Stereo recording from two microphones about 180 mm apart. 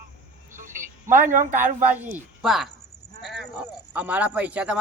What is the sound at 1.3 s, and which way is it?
Speech, 45° right (ahead or behind).